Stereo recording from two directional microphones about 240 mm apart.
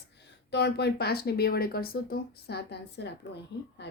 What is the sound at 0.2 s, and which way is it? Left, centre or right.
A woman's voice, left.